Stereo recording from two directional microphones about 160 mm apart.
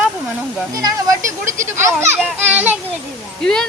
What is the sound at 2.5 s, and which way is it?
Speech, 10° right (ahead or behind).